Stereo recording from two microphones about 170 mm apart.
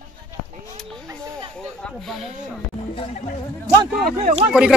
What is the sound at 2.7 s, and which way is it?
Speech, 35° left (ahead or behind).